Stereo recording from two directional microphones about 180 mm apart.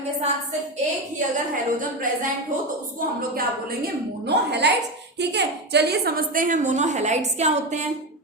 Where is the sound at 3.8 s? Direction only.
65° right (ahead or behind); by 7.8 s 40° right (ahead or behind).